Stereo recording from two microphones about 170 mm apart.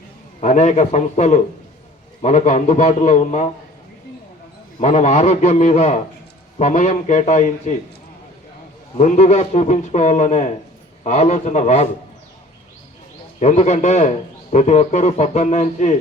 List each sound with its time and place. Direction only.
0.4 s a man's voice: 45° left (ahead or behind)
4.8 s a man's voice: 40° left (ahead or behind)
9.0 s a man's voice: 40° left (ahead or behind)
13.4 s a man's voice: 40° left (ahead or behind)